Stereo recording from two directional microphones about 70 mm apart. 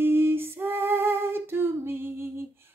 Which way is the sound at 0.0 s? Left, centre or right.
Right.